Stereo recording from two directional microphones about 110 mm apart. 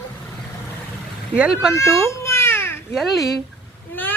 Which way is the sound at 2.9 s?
Centre (ahead or behind).